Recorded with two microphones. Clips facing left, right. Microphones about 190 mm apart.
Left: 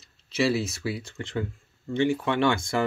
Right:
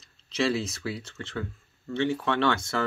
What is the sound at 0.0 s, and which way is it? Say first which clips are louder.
Speech: left 2 dB; 5° left (ahead or behind).